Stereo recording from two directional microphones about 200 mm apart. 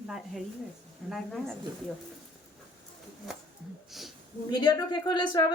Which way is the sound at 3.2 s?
Centre (ahead or behind).